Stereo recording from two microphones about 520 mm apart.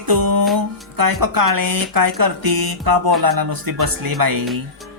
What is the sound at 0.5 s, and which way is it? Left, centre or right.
Speech, right.